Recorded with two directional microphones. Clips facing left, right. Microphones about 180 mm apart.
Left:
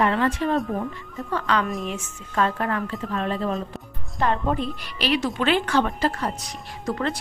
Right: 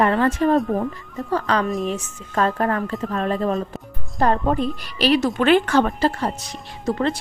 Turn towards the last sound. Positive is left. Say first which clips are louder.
# right 4 dB
turn(degrees=-25)  # may be behind; listen again after turning